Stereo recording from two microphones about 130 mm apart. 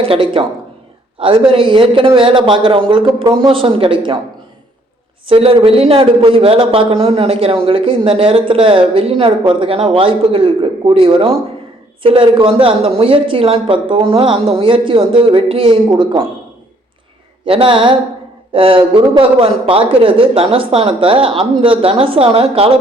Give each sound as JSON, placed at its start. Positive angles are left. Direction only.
{"t": 0.0, "sound": "a man's voice", "side_deg": -45}
{"t": 5.2, "sound": "a man's voice", "side_deg": -45}
{"t": 17.4, "sound": "a man's voice", "side_deg": -40}